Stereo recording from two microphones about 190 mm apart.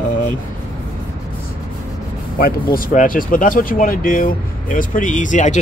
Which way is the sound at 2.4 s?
50° left (ahead or behind).